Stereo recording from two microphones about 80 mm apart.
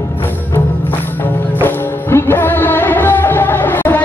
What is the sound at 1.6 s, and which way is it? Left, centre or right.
Music, left.